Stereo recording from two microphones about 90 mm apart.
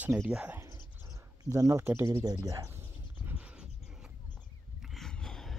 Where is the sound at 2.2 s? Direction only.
45° right (ahead or behind).